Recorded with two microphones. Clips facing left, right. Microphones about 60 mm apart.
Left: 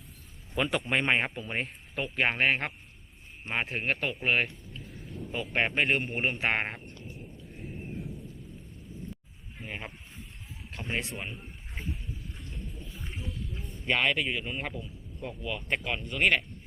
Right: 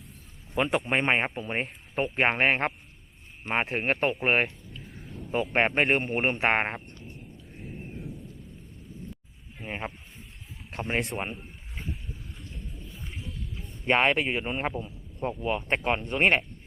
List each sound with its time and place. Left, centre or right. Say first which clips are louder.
0.5 s a man's voice: right 3 dB; centre; by 4.4 s right
4.8 s a sound: even; centre
5.5 s speech: right 3 dB; right
7.0 s thunder: even; centre
9.6 s speech: right 5 dB; right
10.7 s speech: right 5 dB; right
12.5 s a sound: left 1 dB; centre
13.8 s speech: right 4 dB; right